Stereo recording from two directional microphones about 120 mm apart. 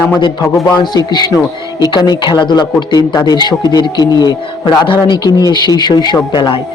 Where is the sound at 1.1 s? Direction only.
35° left (ahead or behind).